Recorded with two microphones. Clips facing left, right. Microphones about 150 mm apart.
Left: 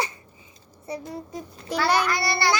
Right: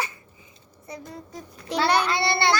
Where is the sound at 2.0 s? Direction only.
25° right (ahead or behind).